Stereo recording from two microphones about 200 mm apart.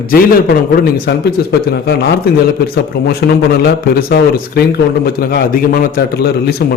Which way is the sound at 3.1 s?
50° left (ahead or behind).